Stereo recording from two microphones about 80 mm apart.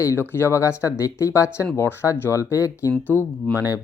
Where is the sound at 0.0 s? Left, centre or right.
Left.